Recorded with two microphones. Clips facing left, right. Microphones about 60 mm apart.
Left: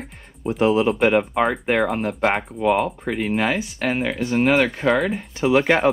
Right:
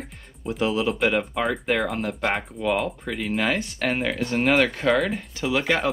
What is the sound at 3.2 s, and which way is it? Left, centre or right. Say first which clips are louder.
Speech: left 2 dB; centre.